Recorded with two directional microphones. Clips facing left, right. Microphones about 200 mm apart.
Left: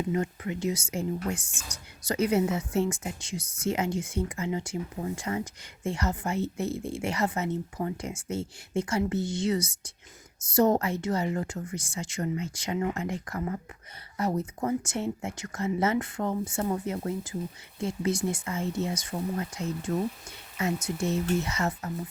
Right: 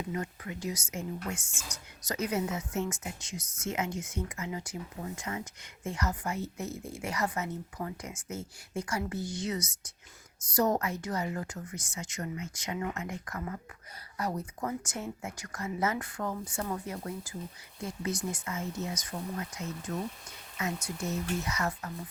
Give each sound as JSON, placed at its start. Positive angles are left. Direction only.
{"t": 0.1, "sound": "speech", "side_deg": 25}